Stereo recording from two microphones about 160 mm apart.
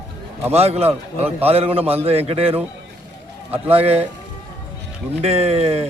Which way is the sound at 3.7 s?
40° right (ahead or behind).